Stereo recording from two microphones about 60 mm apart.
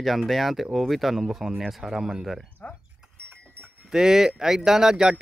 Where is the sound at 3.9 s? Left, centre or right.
Centre.